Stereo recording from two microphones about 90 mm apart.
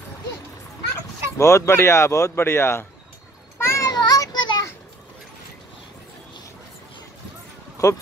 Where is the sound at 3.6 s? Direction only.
30° left (ahead or behind).